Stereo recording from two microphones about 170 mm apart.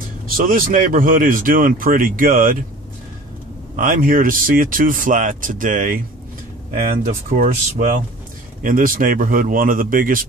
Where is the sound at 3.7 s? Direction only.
50° right (ahead or behind).